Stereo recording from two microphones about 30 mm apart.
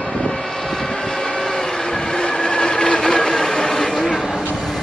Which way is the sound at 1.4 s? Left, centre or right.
Left.